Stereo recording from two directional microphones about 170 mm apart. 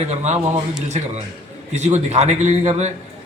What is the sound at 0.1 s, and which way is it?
Speech, 40° right (ahead or behind).